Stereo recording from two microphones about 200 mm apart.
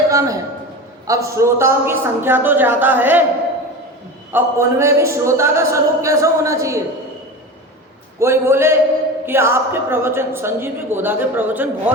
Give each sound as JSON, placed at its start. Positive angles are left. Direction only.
{"t": 0.1, "sound": "a man's voice", "side_deg": -15}
{"t": 4.3, "sound": "speech", "side_deg": -10}
{"t": 8.2, "sound": "speech", "side_deg": -15}